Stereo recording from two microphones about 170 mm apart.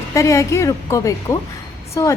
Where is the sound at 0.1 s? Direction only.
20° left (ahead or behind).